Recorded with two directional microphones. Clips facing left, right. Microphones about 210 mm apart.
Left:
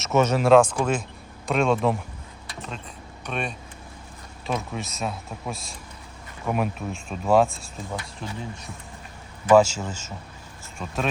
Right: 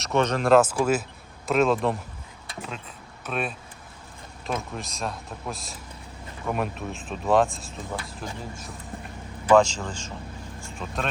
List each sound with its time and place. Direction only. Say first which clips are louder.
0.0 s a man's voice: left 3 dB; 5° left (ahead or behind)
9.5 s a man's voice: left 2 dB; 5° left (ahead or behind)